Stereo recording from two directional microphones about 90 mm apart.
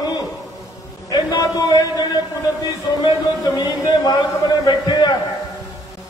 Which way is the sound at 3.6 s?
45° left (ahead or behind).